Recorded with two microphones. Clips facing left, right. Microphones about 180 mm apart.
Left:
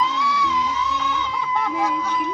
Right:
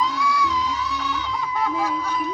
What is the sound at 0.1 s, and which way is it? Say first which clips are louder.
Music: even; 20° left (ahead or behind).